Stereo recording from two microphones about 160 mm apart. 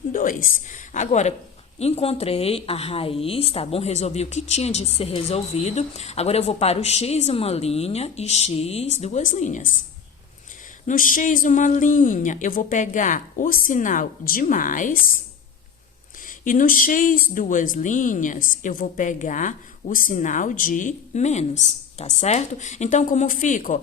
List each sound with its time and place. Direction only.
0.1 s a woman's voice: 60° left (ahead or behind)
10.8 s speech: 55° left (ahead or behind)
16.2 s speech: 60° left (ahead or behind)